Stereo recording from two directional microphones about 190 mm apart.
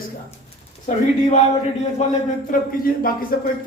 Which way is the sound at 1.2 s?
35° left (ahead or behind).